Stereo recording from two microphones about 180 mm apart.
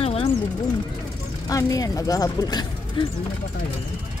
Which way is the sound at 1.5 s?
20° left (ahead or behind).